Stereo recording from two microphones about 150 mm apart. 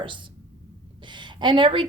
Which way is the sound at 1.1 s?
30° right (ahead or behind).